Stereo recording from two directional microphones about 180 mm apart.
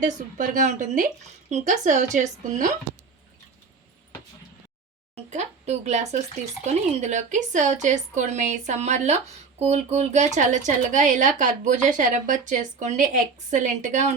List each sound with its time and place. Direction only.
0.0 s a woman's voice: 45° right (ahead or behind)
5.1 s a woman's voice: 40° right (ahead or behind)